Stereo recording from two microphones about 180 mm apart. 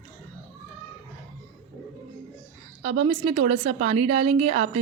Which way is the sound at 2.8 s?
35° right (ahead or behind).